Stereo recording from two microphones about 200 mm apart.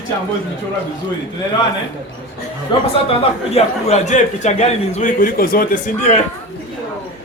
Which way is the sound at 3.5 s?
35° left (ahead or behind).